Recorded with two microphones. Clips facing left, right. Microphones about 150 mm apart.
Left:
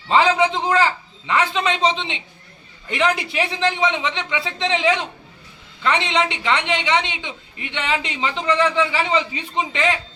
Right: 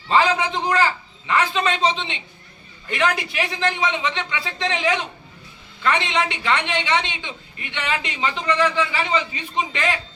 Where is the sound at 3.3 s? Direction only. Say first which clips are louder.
Left 2 dB; 20° left (ahead or behind).